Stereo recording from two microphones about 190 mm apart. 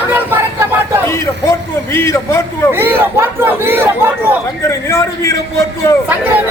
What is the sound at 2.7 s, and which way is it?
Speech, 10° right (ahead or behind).